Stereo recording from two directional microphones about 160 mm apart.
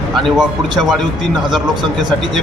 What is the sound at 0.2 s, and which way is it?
Speech, centre (ahead or behind).